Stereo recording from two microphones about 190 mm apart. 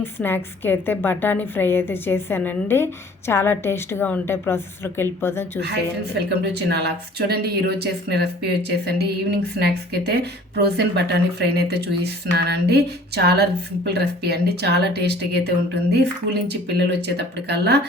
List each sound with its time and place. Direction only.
0.0 s a woman's voice: 10° left (ahead or behind)
6.1 s a woman's voice: 60° right (ahead or behind)